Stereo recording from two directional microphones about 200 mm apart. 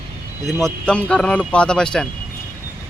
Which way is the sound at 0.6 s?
5° left (ahead or behind).